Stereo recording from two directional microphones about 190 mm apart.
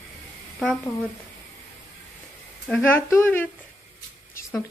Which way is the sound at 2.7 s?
10° left (ahead or behind).